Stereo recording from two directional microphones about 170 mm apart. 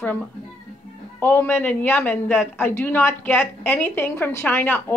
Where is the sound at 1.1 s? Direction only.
15° left (ahead or behind).